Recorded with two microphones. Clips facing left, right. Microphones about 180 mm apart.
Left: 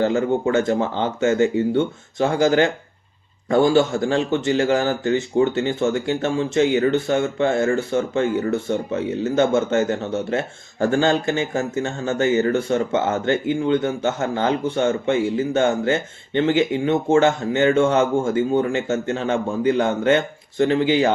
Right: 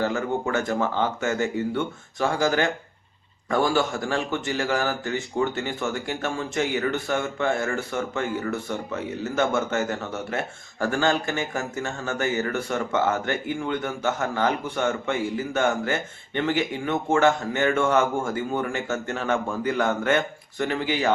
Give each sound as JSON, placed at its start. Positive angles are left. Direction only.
{"t": 0.5, "sound": "speech", "side_deg": 25}